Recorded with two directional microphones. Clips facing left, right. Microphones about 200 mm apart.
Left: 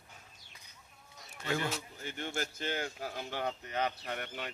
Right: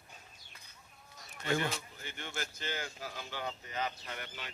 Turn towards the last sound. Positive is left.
turn(degrees=55)  # may be behind; listen again after turning